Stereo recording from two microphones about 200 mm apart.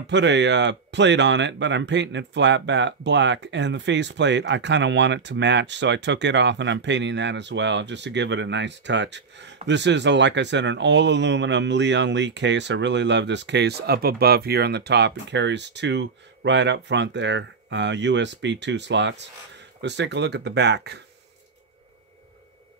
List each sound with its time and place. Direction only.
0.0 s speech: 60° right (ahead or behind)